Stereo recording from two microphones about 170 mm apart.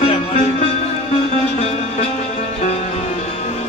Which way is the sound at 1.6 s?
40° left (ahead or behind).